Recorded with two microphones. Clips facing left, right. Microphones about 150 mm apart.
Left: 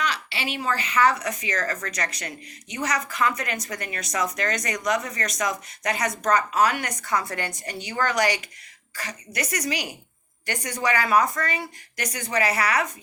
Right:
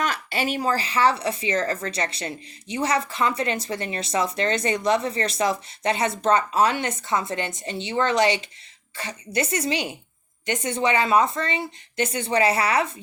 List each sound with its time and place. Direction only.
0.0 s speech: 45° right (ahead or behind); by 12.9 s 30° right (ahead or behind)